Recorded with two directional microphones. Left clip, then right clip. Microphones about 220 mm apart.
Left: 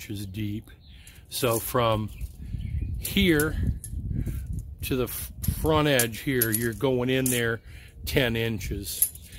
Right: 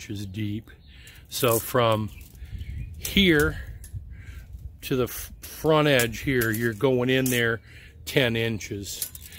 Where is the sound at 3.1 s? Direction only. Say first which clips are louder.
Right 3 dB; 5° right (ahead or behind).